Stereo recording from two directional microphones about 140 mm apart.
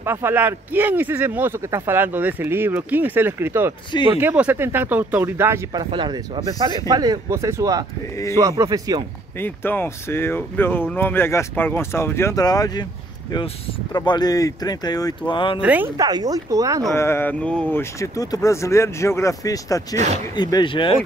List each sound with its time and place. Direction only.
0.0 s speech: 15° right (ahead or behind)
9.4 s speech: 15° left (ahead or behind)
13.9 s speech: 30° left (ahead or behind)
15.6 s speech: 10° right (ahead or behind)
16.0 s speech: 25° right (ahead or behind)
16.9 s speech: 15° left (ahead or behind); by 20.9 s 35° left (ahead or behind)